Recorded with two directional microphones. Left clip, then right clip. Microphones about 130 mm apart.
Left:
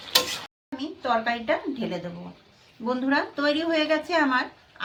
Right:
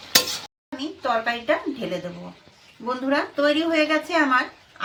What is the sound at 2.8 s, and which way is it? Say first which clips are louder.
A woman's voice: right 1 dB; 25° left (ahead or behind).